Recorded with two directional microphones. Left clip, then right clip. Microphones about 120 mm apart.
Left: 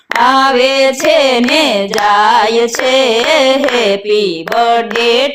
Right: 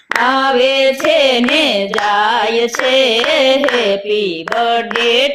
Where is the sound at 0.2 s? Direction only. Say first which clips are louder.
Left 4 dB; 40° left (ahead or behind).